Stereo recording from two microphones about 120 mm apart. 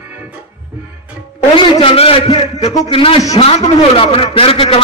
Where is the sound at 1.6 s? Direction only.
45° left (ahead or behind).